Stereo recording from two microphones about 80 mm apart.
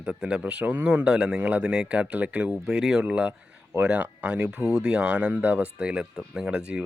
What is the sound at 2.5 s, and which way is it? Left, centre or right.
Speech, centre.